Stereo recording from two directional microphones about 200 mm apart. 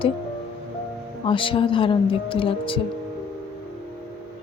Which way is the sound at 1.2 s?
25° left (ahead or behind).